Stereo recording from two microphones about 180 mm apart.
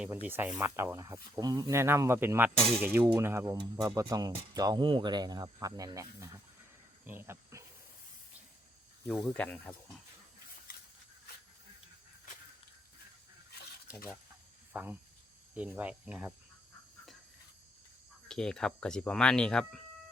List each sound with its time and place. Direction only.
0.3 s speech: 10° right (ahead or behind)
9.0 s speech: 5° left (ahead or behind)
14.7 s speech: 10° right (ahead or behind)
18.3 s speech: 5° left (ahead or behind)